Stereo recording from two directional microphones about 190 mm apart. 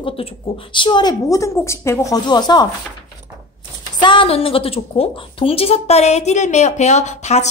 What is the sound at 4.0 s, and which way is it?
A woman's voice, 25° left (ahead or behind).